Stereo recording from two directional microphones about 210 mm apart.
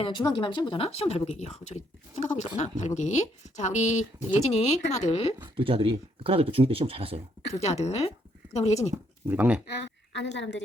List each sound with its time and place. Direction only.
0.0 s speech: 20° left (ahead or behind)
5.5 s speech: 25° right (ahead or behind)
7.5 s speech: 30° left (ahead or behind)
9.2 s speech: 10° right (ahead or behind)
9.6 s a woman's voice: 55° left (ahead or behind)